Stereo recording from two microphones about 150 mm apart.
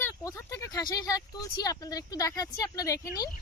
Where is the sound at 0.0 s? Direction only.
25° left (ahead or behind).